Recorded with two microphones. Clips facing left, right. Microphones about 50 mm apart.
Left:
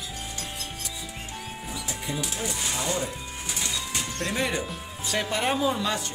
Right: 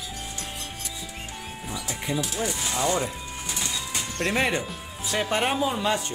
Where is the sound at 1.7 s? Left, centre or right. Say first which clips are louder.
Right 4 dB; centre.